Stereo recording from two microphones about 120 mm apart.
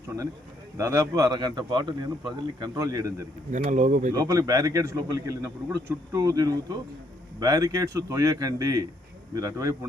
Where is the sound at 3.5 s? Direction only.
90° right; by 4.1 s 75° right (ahead or behind).